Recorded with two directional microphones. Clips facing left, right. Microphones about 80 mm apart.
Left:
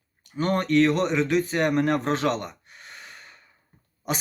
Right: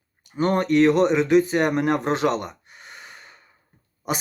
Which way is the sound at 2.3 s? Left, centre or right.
Centre.